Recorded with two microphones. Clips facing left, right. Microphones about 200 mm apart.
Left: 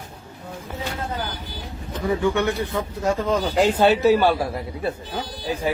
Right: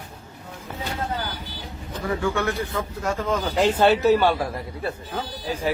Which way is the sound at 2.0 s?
20° left (ahead or behind).